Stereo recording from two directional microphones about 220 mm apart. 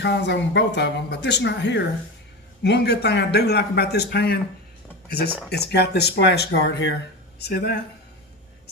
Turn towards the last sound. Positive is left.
turn(degrees=45)  # may be behind; listen again after turning